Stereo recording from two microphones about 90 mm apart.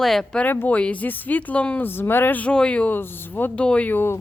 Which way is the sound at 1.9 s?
25° left (ahead or behind).